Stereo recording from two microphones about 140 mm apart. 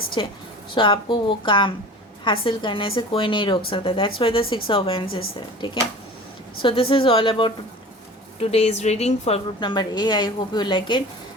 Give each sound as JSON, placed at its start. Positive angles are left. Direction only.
{"t": 0.2, "sound": "speech", "side_deg": 35}
{"t": 8.4, "sound": "a woman's voice", "side_deg": 50}
{"t": 9.6, "sound": "speech", "side_deg": 30}